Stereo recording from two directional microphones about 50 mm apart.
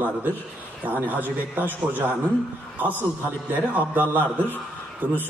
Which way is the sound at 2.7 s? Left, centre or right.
Right.